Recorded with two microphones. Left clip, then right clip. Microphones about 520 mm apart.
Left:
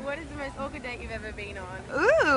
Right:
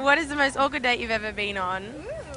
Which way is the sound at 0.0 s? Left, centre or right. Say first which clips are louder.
Right 13 dB; right.